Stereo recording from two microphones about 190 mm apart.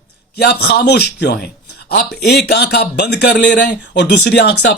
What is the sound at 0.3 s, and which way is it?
Speech, 60° left (ahead or behind).